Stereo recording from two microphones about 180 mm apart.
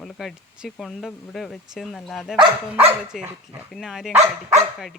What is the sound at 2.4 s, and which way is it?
Speech, 30° right (ahead or behind).